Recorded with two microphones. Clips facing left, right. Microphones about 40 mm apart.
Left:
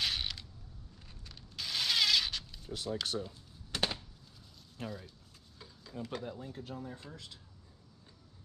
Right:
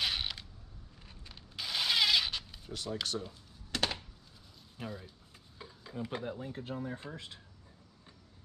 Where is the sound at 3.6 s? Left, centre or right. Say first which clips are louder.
Right 1 dB; centre.